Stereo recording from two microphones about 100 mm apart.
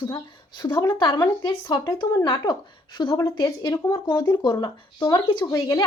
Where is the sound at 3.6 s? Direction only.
40° left (ahead or behind).